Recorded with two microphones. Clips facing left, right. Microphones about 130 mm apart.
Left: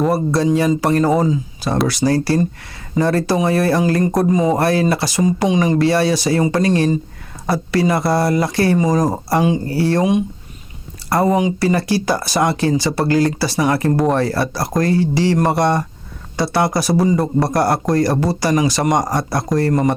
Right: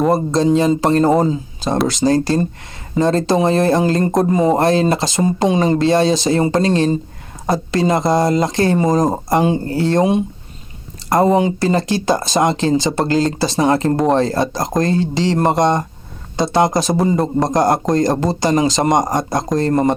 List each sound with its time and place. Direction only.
0.1 s speech: 20° right (ahead or behind)
11.6 s speech: 20° right (ahead or behind)